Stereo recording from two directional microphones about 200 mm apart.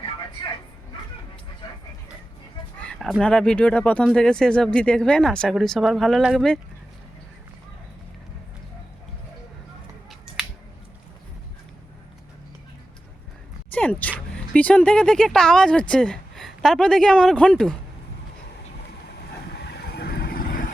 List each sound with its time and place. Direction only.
2.8 s speech: centre (ahead or behind)
13.7 s speech: 5° left (ahead or behind)
19.5 s vehicle: 55° left (ahead or behind)